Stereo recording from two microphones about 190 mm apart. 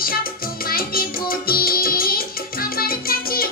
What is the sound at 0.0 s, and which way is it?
Music, 50° left (ahead or behind).